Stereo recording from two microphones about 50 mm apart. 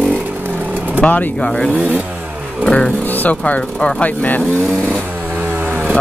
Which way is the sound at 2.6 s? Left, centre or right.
Centre.